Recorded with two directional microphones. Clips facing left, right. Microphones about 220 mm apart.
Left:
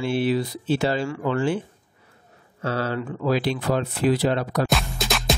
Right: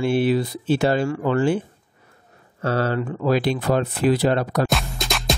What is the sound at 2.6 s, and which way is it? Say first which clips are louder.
Speech: right 4 dB; 50° right (ahead or behind).